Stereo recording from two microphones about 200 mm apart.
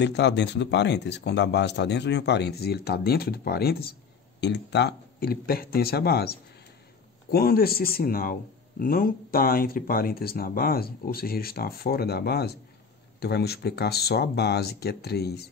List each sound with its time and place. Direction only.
0.0 s speech: 60° left (ahead or behind)